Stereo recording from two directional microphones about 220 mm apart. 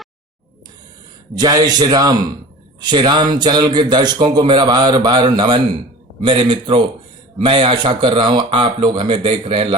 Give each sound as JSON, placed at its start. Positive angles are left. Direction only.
{"t": 1.4, "sound": "a man's voice", "side_deg": -20}